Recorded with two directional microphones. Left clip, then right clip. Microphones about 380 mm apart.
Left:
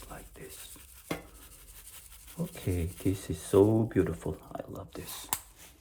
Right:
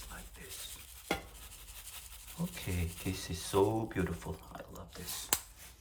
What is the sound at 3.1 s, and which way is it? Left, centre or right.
Speech, centre.